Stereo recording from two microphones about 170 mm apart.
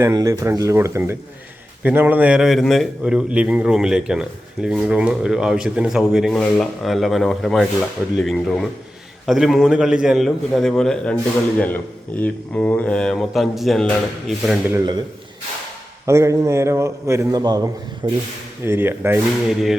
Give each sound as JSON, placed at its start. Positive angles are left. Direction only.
{"t": 0.0, "sound": "a man's voice", "side_deg": -20}
{"t": 16.0, "sound": "a man's voice", "side_deg": -15}